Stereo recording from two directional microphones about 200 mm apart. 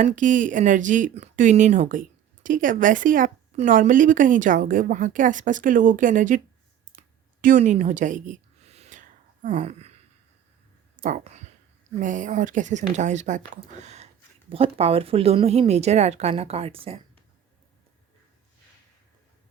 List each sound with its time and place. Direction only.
0.0 s speech: 40° right (ahead or behind)
7.4 s a sound: 40° right (ahead or behind)
10.9 s speech: 40° right (ahead or behind)